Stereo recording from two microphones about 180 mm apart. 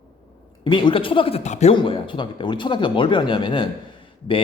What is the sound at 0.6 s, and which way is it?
Speech, 25° left (ahead or behind).